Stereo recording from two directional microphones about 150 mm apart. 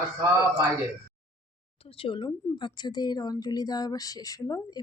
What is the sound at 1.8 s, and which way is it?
A woman's voice, 40° left (ahead or behind).